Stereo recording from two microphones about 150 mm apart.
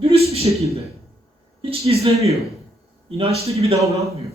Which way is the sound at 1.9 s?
45° right (ahead or behind).